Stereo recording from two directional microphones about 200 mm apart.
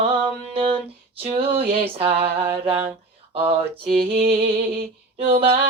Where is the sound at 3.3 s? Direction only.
30° right (ahead or behind).